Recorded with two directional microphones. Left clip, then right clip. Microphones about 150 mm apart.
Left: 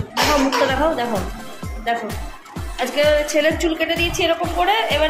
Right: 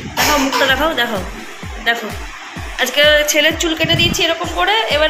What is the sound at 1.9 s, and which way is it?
Speech, centre (ahead or behind).